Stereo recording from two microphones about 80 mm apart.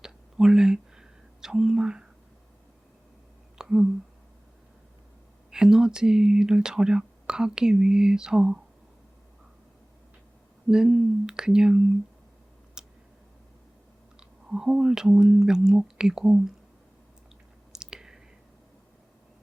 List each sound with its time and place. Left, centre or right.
0.0 s a sound: centre
3.6 s a sound: centre
5.5 s speech: centre
10.7 s speech: centre
12.8 s tick: centre
14.2 s speech: centre
17.7 s whispering: centre